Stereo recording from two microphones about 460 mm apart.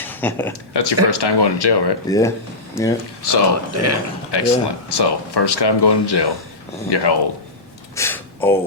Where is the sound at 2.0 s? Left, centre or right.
Centre.